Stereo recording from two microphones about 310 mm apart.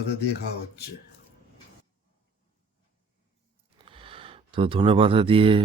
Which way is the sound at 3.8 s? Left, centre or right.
Centre.